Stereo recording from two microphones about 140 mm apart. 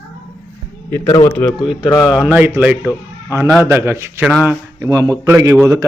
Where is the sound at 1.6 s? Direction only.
Centre (ahead or behind).